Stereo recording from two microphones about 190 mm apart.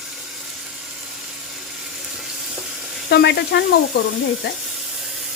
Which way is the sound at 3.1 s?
60° left (ahead or behind).